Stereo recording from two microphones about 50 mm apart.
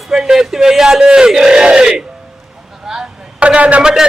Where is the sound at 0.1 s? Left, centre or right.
Centre.